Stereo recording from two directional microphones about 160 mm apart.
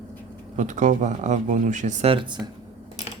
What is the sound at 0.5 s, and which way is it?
Speech, 50° right (ahead or behind).